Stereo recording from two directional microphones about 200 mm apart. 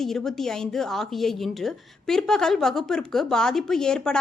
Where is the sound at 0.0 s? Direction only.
Centre (ahead or behind).